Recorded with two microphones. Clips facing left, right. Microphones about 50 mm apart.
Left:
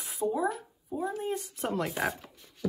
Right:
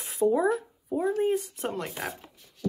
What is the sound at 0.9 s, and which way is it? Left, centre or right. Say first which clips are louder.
Speech: right 7 dB; right.